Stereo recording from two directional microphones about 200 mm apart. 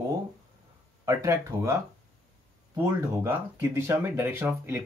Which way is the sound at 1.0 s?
15° right (ahead or behind).